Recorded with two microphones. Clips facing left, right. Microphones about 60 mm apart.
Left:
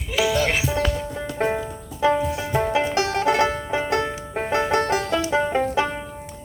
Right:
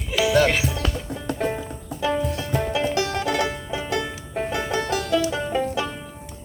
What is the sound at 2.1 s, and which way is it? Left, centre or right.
Music, centre.